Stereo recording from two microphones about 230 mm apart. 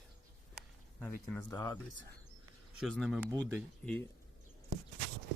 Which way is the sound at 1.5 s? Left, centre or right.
Centre.